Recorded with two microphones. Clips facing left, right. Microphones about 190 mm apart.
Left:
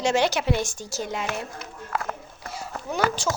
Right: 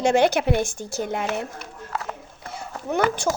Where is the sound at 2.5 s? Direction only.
55° right (ahead or behind).